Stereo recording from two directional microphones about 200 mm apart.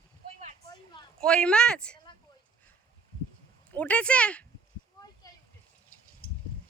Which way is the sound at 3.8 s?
5° left (ahead or behind).